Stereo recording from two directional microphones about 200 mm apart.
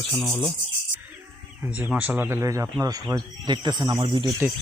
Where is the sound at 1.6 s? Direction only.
10° right (ahead or behind).